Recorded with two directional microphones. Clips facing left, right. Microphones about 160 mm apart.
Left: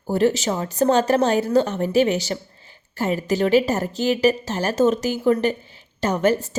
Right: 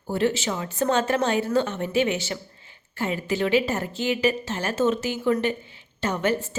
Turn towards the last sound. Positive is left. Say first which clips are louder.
# left 5 dB
turn(degrees=40)  # may be behind; listen again after turning